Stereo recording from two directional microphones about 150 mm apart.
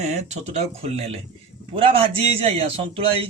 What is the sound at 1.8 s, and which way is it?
A man's voice, 35° right (ahead or behind).